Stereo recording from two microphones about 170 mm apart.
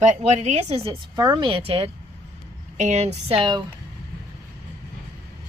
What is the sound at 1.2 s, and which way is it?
Speech, 25° right (ahead or behind).